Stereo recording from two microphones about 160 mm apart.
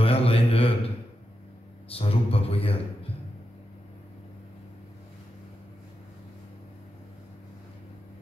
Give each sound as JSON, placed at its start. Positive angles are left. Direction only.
{"t": 0.0, "sound": "mantra", "side_deg": 35}
{"t": 2.0, "sound": "a man's voice", "side_deg": 35}